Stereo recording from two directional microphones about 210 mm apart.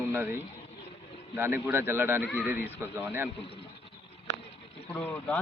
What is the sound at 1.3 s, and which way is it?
Speech, 10° right (ahead or behind).